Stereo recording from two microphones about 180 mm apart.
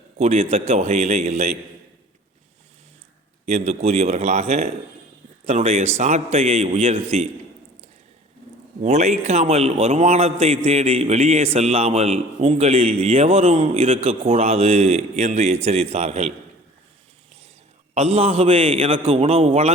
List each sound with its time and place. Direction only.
0.2 s a man's voice: 35° right (ahead or behind)
3.5 s a man's voice: 40° right (ahead or behind)
8.8 s a man's voice: 40° right (ahead or behind)
17.9 s a man's voice: 35° right (ahead or behind)